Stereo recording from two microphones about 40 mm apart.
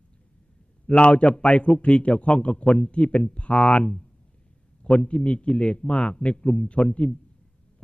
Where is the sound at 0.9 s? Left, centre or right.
Left.